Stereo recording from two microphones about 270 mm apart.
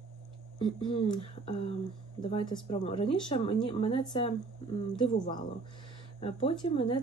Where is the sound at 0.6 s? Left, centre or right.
Centre.